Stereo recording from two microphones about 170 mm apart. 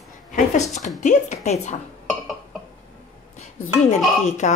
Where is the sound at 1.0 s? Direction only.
45° left (ahead or behind).